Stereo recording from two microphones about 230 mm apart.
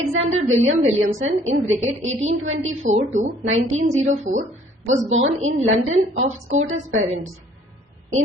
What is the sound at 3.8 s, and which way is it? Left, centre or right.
Speech, right.